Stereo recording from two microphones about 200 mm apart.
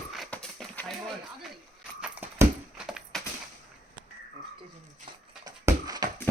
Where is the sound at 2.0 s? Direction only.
5° right (ahead or behind).